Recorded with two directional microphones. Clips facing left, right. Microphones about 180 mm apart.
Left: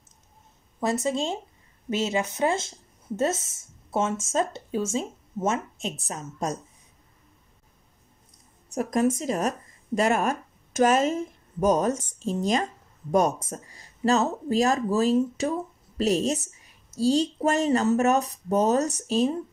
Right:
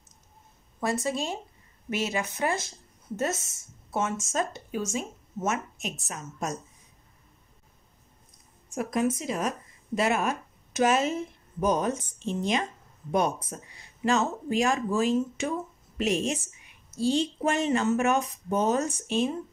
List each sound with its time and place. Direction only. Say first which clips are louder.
0.7 s speech: left 3 dB; 20° left (ahead or behind)
8.7 s a woman's voice: left 3 dB; 40° left (ahead or behind)